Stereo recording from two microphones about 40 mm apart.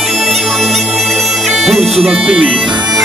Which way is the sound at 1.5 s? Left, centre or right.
Centre.